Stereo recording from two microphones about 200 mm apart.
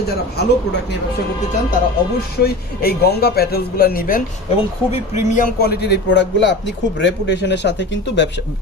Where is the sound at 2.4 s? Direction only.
50° left (ahead or behind).